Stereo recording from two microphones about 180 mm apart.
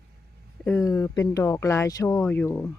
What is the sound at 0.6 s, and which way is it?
Speech, 15° left (ahead or behind).